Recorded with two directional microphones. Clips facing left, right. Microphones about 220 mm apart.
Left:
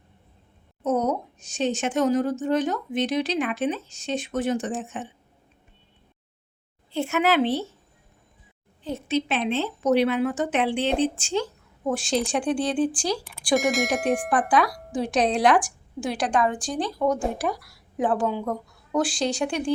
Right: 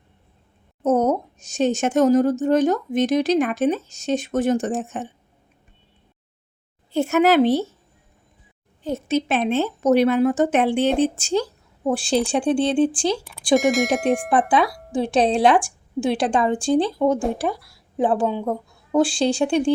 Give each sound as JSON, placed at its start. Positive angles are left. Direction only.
{"t": 0.8, "sound": "speech", "side_deg": -45}
{"t": 6.9, "sound": "speech", "side_deg": -45}
{"t": 8.8, "sound": "a woman's voice", "side_deg": -45}
{"t": 13.6, "sound": "speech", "side_deg": 0}
{"t": 14.9, "sound": "a woman's voice", "side_deg": -30}